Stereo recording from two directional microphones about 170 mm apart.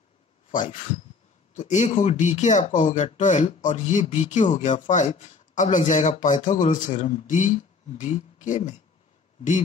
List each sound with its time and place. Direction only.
0.5 s speech: 50° left (ahead or behind)